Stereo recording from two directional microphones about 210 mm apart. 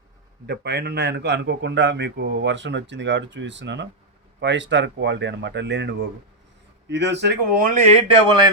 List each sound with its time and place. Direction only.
0.4 s a man's voice: 50° right (ahead or behind)